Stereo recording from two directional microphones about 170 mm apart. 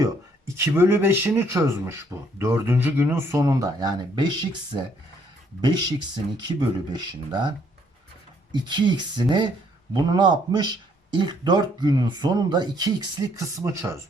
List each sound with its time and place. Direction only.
0.5 s speech: 15° right (ahead or behind)
8.5 s speech: 25° right (ahead or behind)